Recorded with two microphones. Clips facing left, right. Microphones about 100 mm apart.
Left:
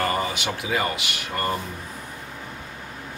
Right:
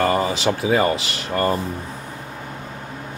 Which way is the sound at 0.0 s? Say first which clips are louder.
Right 6 dB; 30° right (ahead or behind).